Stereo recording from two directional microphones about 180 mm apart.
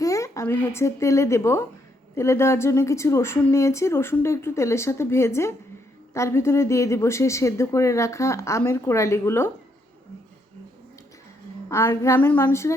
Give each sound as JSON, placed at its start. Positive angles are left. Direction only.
{"t": 0.0, "sound": "a woman's voice", "side_deg": 15}
{"t": 11.7, "sound": "speech", "side_deg": 15}